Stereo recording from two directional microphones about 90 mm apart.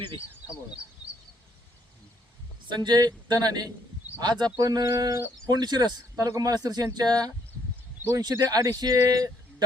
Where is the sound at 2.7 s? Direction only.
55° right (ahead or behind).